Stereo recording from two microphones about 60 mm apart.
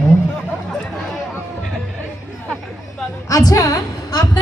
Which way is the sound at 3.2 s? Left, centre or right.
Left.